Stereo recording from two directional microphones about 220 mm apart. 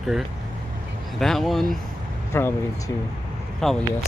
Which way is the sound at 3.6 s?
Centre (ahead or behind).